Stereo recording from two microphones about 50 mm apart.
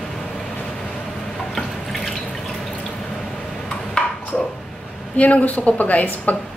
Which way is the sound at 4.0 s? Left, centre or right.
Left.